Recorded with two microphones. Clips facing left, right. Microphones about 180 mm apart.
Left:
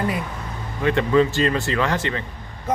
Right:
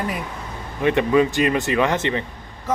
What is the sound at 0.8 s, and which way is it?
Speech, 15° right (ahead or behind).